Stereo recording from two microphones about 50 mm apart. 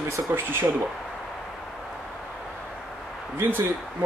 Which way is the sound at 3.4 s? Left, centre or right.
Right.